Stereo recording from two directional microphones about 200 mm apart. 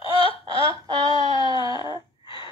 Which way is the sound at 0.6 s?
20° right (ahead or behind).